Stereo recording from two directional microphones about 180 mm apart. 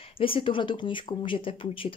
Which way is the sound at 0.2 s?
30° left (ahead or behind).